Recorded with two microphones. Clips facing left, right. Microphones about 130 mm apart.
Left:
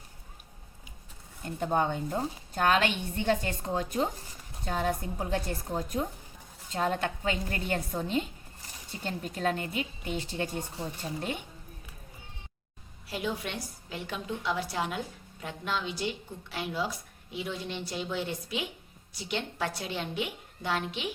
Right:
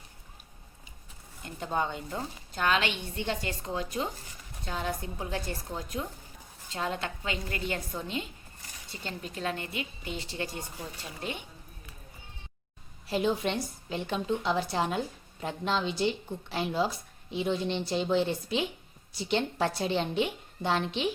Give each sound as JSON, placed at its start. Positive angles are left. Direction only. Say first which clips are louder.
{"t": 1.5, "sound": "a woman's voice", "louder": "left 3 dB", "side_deg": 50}
{"t": 10.5, "sound": "speech", "louder": "left 4 dB", "side_deg": 35}
{"t": 13.1, "sound": "a woman's voice", "louder": "right 6 dB", "side_deg": -30}